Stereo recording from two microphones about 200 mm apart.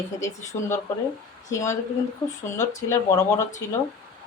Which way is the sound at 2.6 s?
15° left (ahead or behind).